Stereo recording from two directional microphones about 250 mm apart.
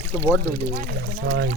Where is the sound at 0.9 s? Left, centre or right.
Right.